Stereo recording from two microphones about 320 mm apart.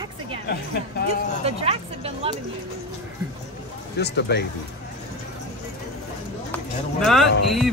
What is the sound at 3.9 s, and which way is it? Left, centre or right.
Speech, left.